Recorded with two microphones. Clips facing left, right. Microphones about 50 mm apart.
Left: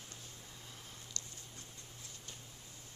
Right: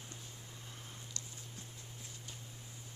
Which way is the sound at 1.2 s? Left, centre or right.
Centre.